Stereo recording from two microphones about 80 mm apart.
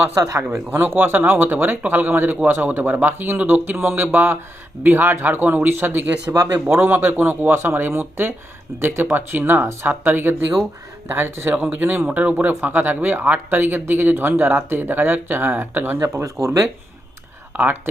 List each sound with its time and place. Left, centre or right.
0.0 s speech: right
0.5 s speech: right
6.2 s speech: right
6.7 s speech: right
16.0 s speech: right
17.5 s speech: right